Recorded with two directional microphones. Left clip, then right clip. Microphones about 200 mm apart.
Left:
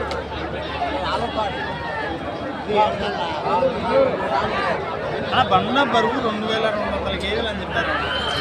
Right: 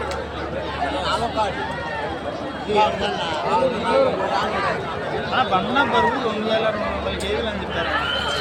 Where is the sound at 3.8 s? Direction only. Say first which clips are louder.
Even; 55° right (ahead or behind).